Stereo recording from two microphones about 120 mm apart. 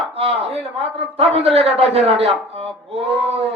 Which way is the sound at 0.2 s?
55° right (ahead or behind).